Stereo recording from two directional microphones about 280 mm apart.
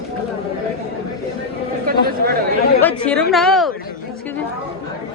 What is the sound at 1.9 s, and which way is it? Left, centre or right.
Speech, right.